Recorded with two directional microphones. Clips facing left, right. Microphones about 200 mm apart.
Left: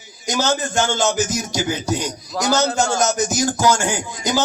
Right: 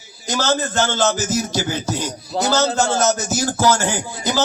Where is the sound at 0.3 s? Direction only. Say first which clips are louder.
Even; 15° left (ahead or behind).